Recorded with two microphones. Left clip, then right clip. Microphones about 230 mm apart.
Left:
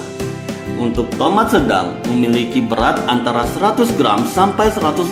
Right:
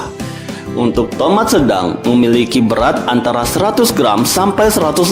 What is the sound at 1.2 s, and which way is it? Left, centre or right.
Speech, right.